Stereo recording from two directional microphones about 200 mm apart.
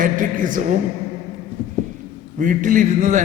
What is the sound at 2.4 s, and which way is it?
Speech, 40° right (ahead or behind).